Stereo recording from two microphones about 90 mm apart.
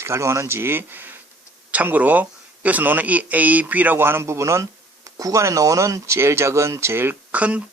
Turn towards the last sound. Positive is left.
turn(degrees=-15)  # may be behind; listen again after turning